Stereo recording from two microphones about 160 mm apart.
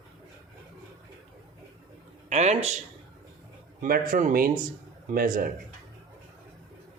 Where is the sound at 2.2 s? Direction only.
45° right (ahead or behind).